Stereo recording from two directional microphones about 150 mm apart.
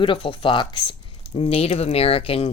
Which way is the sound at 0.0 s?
35° left (ahead or behind).